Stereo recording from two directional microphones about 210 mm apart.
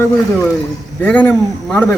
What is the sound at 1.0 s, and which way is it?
Speech, 5° left (ahead or behind).